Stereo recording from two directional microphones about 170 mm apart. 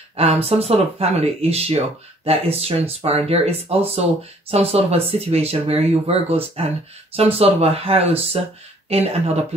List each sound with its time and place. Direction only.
0.1 s speech: 35° right (ahead or behind)